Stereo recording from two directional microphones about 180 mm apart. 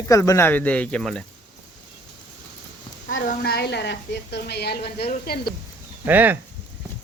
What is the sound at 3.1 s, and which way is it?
A woman's voice, 50° left (ahead or behind).